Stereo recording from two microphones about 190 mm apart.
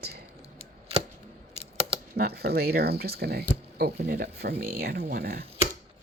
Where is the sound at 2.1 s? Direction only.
55° right (ahead or behind).